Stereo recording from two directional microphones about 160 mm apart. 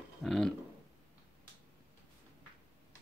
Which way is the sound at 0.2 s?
5° left (ahead or behind).